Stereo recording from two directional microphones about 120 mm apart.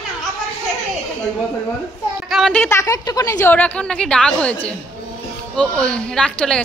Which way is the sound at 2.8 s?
30° left (ahead or behind).